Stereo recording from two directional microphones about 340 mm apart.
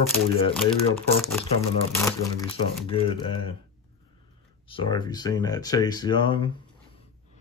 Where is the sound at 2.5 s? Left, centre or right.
Centre.